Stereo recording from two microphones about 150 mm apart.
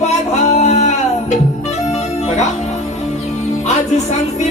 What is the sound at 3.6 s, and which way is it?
Music, 50° left (ahead or behind).